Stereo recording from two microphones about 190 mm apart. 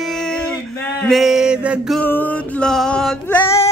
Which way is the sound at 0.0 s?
5° left (ahead or behind).